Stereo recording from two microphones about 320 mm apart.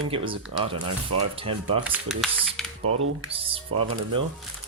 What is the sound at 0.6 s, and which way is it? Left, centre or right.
Speech, centre.